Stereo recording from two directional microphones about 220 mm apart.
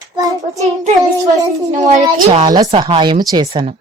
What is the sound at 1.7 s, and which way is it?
Speech, 35° right (ahead or behind).